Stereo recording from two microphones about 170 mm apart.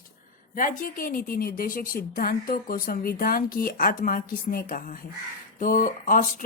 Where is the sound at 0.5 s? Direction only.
55° left (ahead or behind).